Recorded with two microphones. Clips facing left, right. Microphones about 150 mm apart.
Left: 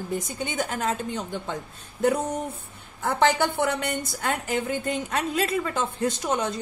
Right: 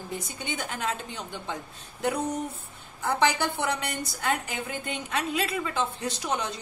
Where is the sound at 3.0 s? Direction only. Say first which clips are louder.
Left 3 dB; 50° left (ahead or behind).